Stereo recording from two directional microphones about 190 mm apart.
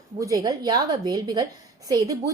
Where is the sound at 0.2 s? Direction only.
20° right (ahead or behind).